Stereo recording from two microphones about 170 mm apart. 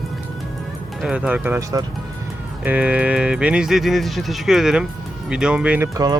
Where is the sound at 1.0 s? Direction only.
5° right (ahead or behind).